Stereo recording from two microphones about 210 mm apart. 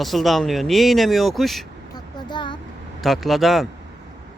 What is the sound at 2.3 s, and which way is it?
Vehicle, 20° left (ahead or behind).